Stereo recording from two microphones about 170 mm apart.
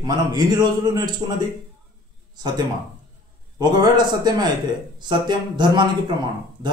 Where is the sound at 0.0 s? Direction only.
25° right (ahead or behind).